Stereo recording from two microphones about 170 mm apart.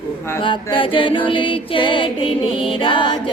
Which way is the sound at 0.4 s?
30° left (ahead or behind).